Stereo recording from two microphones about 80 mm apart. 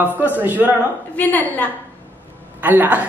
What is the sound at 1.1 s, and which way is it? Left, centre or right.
Speech, left.